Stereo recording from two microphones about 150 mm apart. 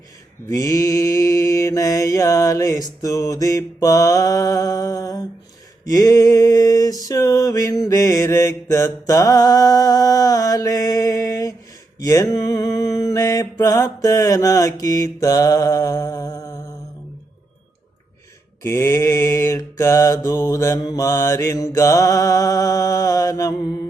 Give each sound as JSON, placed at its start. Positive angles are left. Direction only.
{"t": 0.4, "sound": "mantra", "side_deg": 20}
{"t": 5.8, "sound": "a sound", "side_deg": 25}
{"t": 12.0, "sound": "mantra", "side_deg": 25}
{"t": 18.6, "sound": "mantra", "side_deg": 15}